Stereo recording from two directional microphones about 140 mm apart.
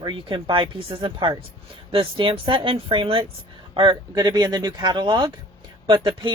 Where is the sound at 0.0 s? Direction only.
35° right (ahead or behind).